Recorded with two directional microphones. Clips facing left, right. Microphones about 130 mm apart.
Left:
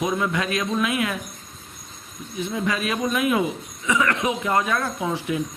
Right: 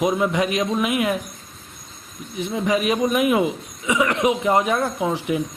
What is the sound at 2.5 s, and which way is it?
Speech, 20° right (ahead or behind).